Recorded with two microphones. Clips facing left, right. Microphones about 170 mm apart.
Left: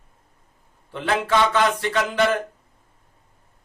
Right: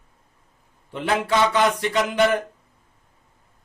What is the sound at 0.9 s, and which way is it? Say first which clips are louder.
A man's voice: even; 15° right (ahead or behind).